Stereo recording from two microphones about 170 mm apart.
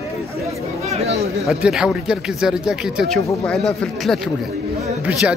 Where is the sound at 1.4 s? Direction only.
Centre (ahead or behind).